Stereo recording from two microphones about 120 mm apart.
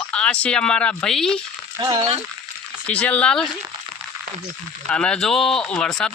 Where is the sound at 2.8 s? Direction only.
10° left (ahead or behind).